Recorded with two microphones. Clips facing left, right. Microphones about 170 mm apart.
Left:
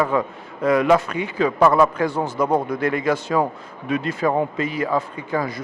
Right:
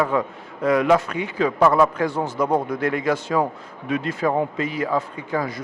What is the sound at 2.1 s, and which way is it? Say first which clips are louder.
Speech: left 1 dB; 35° left (ahead or behind).